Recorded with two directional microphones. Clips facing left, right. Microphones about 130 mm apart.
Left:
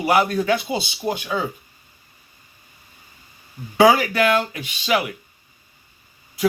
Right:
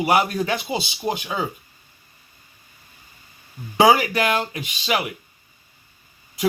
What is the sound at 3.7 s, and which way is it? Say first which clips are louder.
A man's voice: left 1 dB; 20° right (ahead or behind).